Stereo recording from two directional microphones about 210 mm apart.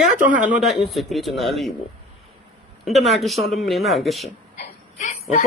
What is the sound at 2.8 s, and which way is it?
Speech, centre (ahead or behind).